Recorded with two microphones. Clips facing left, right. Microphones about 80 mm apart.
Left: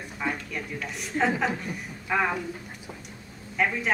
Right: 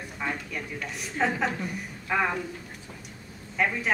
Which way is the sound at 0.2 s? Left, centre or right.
Centre.